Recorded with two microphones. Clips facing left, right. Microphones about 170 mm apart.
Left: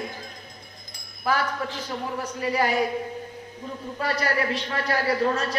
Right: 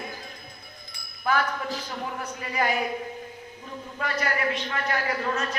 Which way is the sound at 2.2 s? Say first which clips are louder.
Left 5 dB; 35° left (ahead or behind).